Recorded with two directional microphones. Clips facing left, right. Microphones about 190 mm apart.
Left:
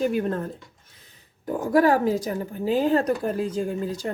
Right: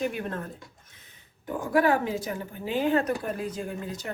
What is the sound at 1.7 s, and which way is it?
A woman's voice, 40° left (ahead or behind).